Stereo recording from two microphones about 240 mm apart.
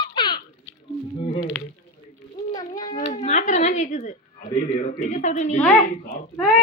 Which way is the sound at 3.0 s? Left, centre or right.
Left.